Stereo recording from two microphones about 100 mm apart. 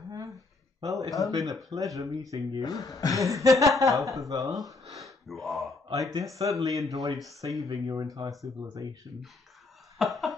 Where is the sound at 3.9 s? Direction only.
Centre (ahead or behind).